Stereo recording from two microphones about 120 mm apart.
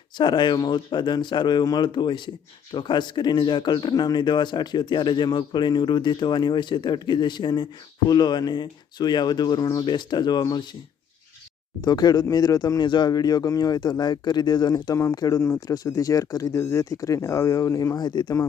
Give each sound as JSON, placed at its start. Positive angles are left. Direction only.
{"t": 0.2, "sound": "speech", "side_deg": 40}
{"t": 11.8, "sound": "speech", "side_deg": 35}